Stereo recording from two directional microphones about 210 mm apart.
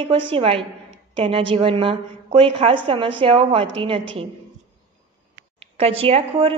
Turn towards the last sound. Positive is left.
turn(degrees=-25)  # may be behind; listen again after turning